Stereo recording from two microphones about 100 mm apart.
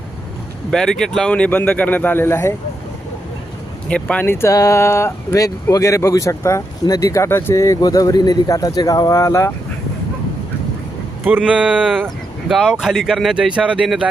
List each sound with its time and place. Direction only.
0.7 s a man's voice: 5° left (ahead or behind); by 2.6 s 25° left (ahead or behind)
3.8 s a man's voice: 10° left (ahead or behind)
4.3 s speech: 25° left (ahead or behind)
11.4 s speech: 15° right (ahead or behind)
11.9 s speech: centre (ahead or behind)